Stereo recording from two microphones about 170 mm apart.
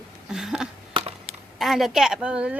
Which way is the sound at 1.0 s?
30° right (ahead or behind).